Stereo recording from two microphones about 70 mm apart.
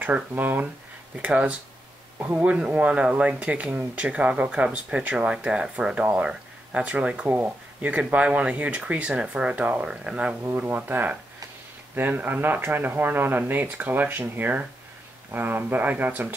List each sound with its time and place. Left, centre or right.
0.0 s speech: right
1.2 s speech: centre
2.1 s speech: right
2.4 s speech: centre
7.2 s speech: right
7.9 s speech: centre
10.4 s speech: right